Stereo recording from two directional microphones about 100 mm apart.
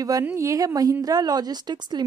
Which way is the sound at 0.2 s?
25° right (ahead or behind).